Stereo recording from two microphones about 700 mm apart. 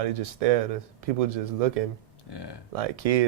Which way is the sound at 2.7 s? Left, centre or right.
Right.